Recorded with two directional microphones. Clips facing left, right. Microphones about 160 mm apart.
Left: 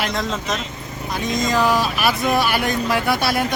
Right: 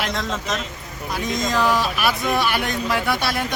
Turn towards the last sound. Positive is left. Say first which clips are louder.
# left 3 dB
turn(degrees=5)  # may be behind; listen again after turning